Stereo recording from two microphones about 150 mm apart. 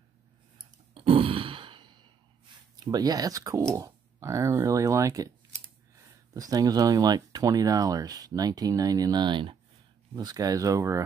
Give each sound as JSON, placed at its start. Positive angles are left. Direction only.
{"t": 0.9, "sound": "sigh", "side_deg": -40}
{"t": 2.7, "sound": "speech", "side_deg": -25}
{"t": 6.3, "sound": "speech", "side_deg": -25}